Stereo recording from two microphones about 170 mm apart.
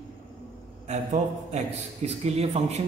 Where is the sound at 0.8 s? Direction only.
40° right (ahead or behind).